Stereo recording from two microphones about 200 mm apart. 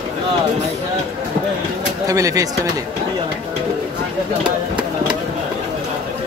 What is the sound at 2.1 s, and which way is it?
Speech, 15° right (ahead or behind).